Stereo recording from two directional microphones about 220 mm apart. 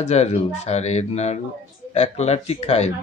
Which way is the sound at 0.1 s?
30° left (ahead or behind).